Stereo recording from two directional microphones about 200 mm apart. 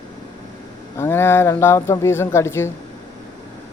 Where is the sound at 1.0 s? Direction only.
10° left (ahead or behind).